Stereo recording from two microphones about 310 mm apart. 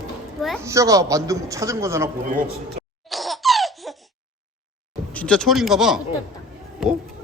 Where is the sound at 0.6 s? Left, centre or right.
Centre.